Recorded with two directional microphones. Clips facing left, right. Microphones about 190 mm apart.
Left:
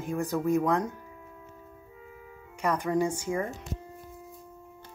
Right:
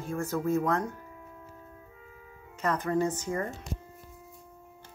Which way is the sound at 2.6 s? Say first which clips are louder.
Left 1 dB; 10° left (ahead or behind).